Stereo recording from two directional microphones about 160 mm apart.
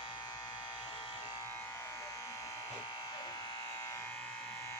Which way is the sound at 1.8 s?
20° left (ahead or behind).